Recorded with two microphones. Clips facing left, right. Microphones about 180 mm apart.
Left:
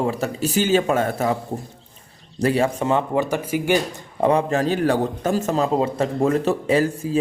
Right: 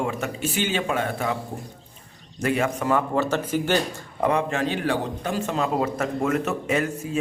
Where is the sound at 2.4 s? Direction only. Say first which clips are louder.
Left 4 dB; 35° left (ahead or behind).